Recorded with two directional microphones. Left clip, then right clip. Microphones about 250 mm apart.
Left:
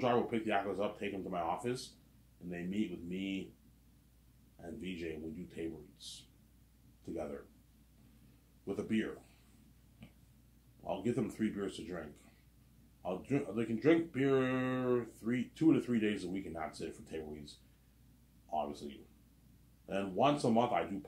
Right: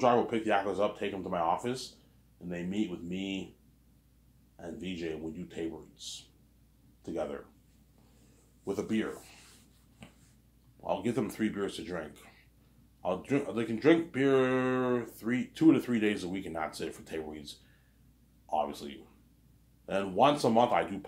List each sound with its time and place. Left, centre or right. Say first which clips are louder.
0.0 s a man's voice: right 6 dB; centre
4.6 s a man's voice: right 5 dB; centre
8.6 s a man's voice: right 4 dB; centre
10.8 s a man's voice: right 5 dB; centre
13.0 s speech: right 6 dB; centre
18.5 s speech: right 6 dB; centre